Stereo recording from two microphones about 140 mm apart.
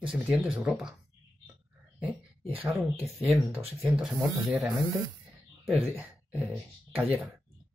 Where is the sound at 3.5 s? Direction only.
5° right (ahead or behind).